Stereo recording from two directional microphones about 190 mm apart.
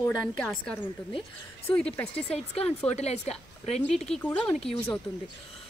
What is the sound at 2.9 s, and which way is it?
A woman's voice, 35° left (ahead or behind).